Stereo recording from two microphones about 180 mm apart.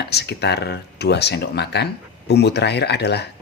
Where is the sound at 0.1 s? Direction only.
65° left (ahead or behind).